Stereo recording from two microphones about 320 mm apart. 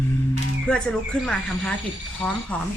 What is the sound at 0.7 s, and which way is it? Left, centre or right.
A woman's voice, centre.